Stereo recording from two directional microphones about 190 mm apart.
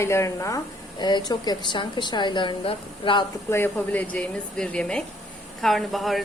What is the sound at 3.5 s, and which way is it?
A woman's voice, 10° left (ahead or behind).